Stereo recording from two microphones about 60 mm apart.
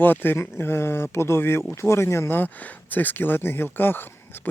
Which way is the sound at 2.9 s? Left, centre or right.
Left.